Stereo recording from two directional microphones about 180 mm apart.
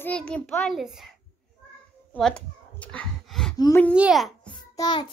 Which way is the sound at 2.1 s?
5° left (ahead or behind).